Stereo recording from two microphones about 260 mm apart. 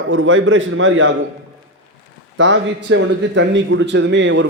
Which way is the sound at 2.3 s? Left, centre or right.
Right.